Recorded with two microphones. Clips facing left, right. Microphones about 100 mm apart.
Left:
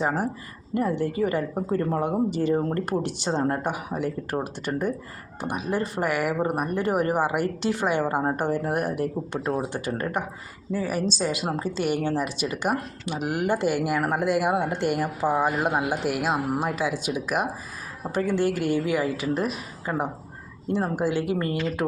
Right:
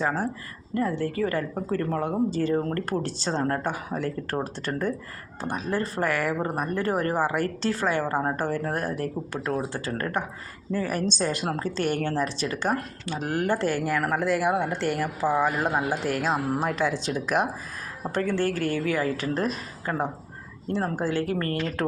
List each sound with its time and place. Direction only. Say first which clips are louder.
0.0 s speech: left 1 dB; 15° left (ahead or behind)